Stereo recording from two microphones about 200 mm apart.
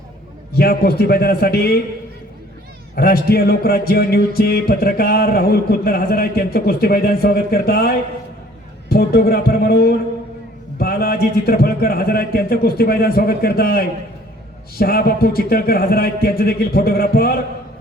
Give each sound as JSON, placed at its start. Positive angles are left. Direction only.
{"t": 0.5, "sound": "music", "side_deg": 50}
{"t": 2.9, "sound": "music", "side_deg": 50}